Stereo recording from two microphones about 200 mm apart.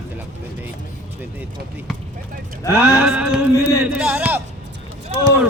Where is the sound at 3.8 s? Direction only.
5° right (ahead or behind).